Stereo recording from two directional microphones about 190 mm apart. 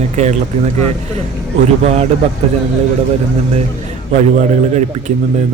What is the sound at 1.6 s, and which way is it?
Speech, 35° right (ahead or behind).